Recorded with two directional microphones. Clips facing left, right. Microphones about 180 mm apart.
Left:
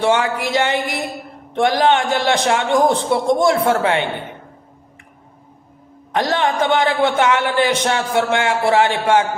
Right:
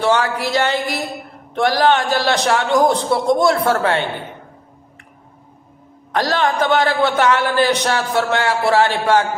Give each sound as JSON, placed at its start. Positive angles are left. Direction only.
{"t": 0.0, "sound": "a man's voice", "side_deg": 20}
{"t": 6.1, "sound": "a man's voice", "side_deg": 20}